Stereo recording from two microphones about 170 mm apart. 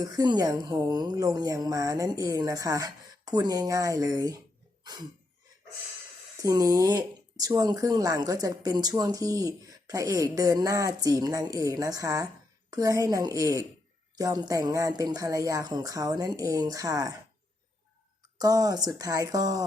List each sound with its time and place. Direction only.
0.0 s speech: 20° right (ahead or behind)
4.8 s cough: 25° right (ahead or behind)
6.4 s speech: 20° right (ahead or behind)
18.3 s speech: 20° right (ahead or behind)